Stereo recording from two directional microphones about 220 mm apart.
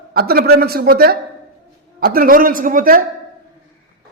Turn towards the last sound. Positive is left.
turn(degrees=-40)  # may be behind; listen again after turning